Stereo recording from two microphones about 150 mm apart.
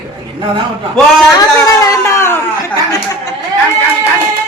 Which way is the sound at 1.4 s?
20° left (ahead or behind).